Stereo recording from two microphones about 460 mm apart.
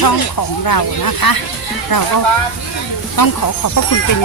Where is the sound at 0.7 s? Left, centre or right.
Left.